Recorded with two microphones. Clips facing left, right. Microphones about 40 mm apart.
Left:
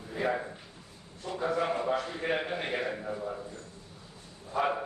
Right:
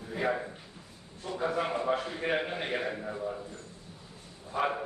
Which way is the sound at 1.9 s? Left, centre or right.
Centre.